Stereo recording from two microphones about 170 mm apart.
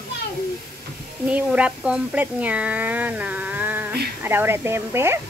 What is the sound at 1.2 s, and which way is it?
Speech, 5° right (ahead or behind).